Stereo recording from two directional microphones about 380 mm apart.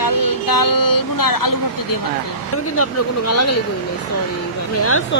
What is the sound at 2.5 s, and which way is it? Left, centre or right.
Speech, left.